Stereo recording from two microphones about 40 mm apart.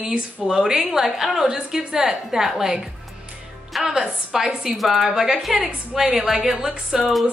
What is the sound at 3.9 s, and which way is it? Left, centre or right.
Speech, centre.